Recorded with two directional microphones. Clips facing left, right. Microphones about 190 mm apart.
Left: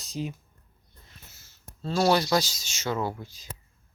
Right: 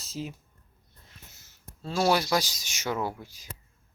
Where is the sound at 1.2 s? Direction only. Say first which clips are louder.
Even; 15° right (ahead or behind).